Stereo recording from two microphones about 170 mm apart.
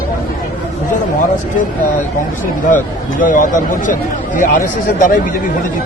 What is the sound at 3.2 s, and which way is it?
Speech, 50° left (ahead or behind).